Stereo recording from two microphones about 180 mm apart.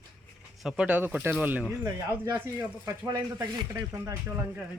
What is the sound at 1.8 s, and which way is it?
Speech, 20° right (ahead or behind).